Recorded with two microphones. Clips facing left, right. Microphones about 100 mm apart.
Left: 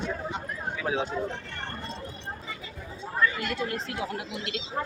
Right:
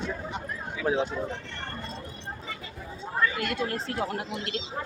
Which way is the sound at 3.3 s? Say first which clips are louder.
Right 1 dB; 55° right (ahead or behind).